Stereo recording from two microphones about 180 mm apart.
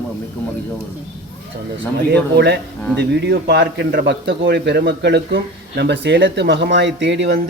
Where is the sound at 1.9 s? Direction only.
65° right (ahead or behind).